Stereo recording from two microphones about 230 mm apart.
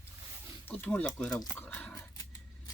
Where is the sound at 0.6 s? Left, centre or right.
Centre.